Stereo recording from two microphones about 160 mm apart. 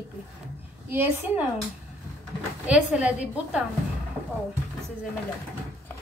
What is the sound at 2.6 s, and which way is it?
A woman's voice, 10° right (ahead or behind).